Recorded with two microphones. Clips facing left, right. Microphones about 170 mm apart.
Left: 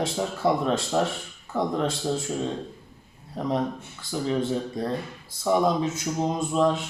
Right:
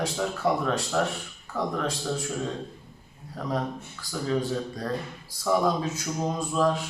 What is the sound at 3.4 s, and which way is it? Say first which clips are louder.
Speech: left 3 dB; 25° left (ahead or behind).